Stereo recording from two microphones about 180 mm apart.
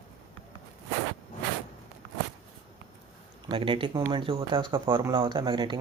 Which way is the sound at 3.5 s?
30° right (ahead or behind).